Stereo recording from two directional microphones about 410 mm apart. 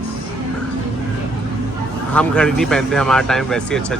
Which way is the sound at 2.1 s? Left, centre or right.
Centre.